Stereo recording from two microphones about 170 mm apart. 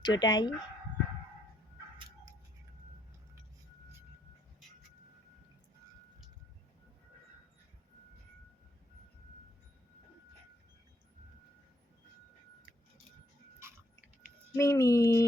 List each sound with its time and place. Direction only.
0.0 s speech: 25° left (ahead or behind)
14.5 s speech: 20° left (ahead or behind)